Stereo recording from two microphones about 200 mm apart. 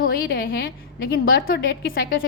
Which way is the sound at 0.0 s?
50° left (ahead or behind).